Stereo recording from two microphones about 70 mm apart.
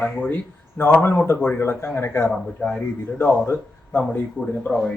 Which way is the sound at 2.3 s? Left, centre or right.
Centre.